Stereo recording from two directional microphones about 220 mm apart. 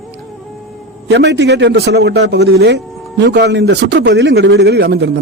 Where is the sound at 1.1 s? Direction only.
50° right (ahead or behind).